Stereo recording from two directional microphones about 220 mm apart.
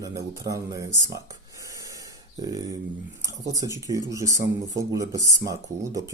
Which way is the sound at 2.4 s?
15° right (ahead or behind).